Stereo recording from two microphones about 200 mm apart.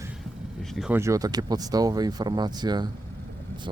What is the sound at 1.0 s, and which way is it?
Speech, 15° right (ahead or behind).